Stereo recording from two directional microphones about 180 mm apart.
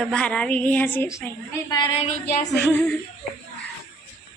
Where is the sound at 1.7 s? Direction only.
30° left (ahead or behind).